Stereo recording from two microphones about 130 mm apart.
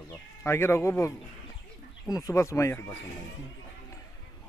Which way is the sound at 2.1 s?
25° left (ahead or behind).